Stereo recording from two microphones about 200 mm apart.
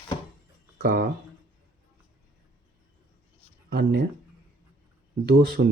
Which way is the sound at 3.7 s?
55° right (ahead or behind).